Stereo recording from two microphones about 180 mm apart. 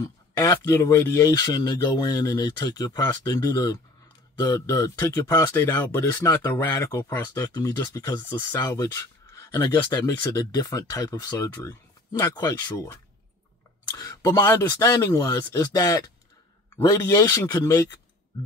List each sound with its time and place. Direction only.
0.0 s speech: 20° left (ahead or behind)